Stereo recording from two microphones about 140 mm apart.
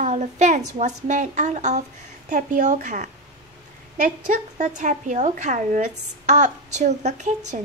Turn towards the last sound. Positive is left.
turn(degrees=-55)  # may be behind; listen again after turning